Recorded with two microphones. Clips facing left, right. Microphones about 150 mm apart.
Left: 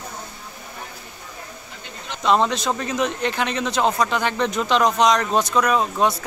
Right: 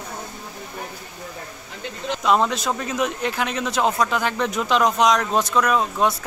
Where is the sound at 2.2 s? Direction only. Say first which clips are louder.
Left 1 dB; 5° right (ahead or behind).